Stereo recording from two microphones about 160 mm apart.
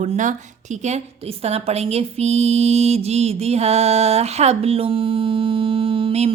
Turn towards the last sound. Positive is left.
turn(degrees=-35)  # may be behind; listen again after turning